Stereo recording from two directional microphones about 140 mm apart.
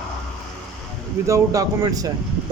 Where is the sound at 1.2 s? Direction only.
25° right (ahead or behind).